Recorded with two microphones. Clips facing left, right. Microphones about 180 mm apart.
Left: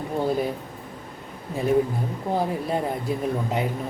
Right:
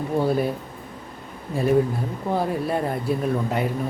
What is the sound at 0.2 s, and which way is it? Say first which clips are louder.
Speech: right 2 dB; 20° left (ahead or behind).